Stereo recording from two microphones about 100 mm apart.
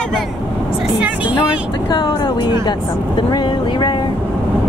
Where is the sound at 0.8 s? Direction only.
15° right (ahead or behind).